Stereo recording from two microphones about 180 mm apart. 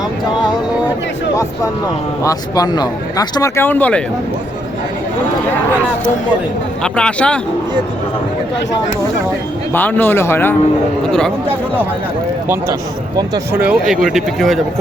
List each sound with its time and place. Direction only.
2.2 s speech: 20° left (ahead or behind)
6.8 s speech: 5° left (ahead or behind)
9.7 s speech: 10° left (ahead or behind)
13.1 s speech: 20° right (ahead or behind)
13.6 s speech: 5° right (ahead or behind)